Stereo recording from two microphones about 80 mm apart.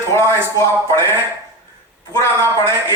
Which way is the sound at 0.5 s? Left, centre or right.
Left.